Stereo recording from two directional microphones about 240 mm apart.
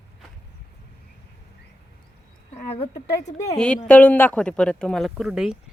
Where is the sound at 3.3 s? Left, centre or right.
Centre.